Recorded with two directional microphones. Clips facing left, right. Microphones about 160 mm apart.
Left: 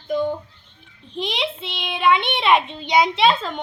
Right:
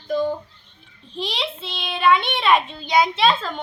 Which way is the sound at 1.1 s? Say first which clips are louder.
Left 2 dB; 15° left (ahead or behind).